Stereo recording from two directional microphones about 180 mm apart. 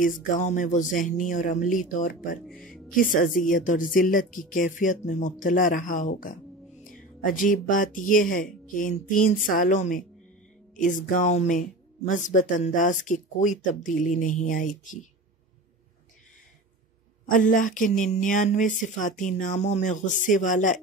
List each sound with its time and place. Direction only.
0.0 s speech: 45° left (ahead or behind)
2.4 s speech: centre (ahead or behind)
3.0 s speech: 50° left (ahead or behind)
17.3 s speech: 45° left (ahead or behind)